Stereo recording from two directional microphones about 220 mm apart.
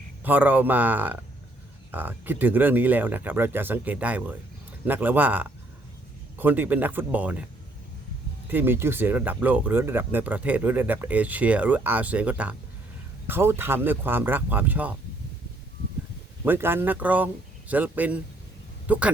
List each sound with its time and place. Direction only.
0.2 s speech: 10° right (ahead or behind)
8.4 s speech: 10° right (ahead or behind)
16.4 s speech: 10° right (ahead or behind)